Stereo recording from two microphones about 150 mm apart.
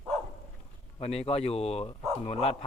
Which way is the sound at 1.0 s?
45° left (ahead or behind).